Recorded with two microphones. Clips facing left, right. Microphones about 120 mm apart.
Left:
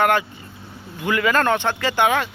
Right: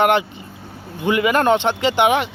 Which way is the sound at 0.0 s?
20° right (ahead or behind).